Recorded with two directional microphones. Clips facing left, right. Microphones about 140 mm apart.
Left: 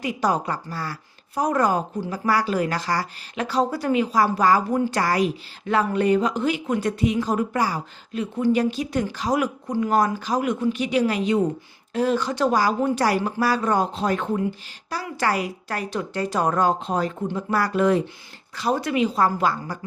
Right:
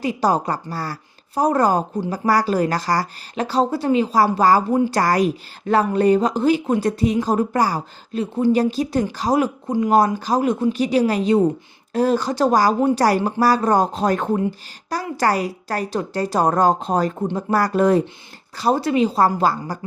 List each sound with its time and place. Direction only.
0.0 s a woman's voice: 35° right (ahead or behind)